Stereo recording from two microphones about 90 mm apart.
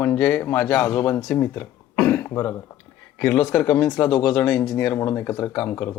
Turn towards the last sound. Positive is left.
turn(degrees=25)  # may be behind; listen again after turning